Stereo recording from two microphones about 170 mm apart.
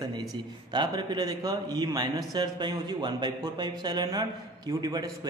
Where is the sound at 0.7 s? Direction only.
25° right (ahead or behind).